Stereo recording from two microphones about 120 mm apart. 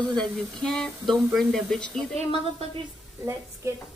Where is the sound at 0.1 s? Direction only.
5° left (ahead or behind).